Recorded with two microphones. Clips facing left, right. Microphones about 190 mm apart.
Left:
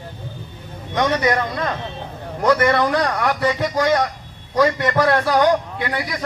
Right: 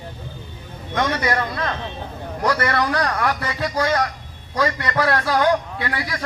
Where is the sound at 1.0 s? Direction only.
20° left (ahead or behind).